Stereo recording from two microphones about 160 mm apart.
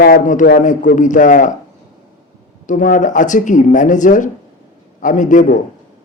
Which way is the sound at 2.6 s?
55° left (ahead or behind).